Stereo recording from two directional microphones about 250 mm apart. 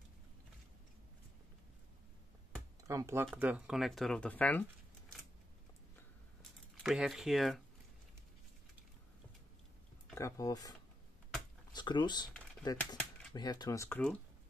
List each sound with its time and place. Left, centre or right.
2.8 s speech: centre
6.8 s speech: centre
10.1 s speech: centre
11.7 s speech: centre